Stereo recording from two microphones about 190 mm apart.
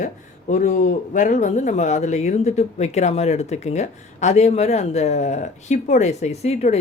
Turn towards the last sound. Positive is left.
turn(degrees=35)  # may be behind; listen again after turning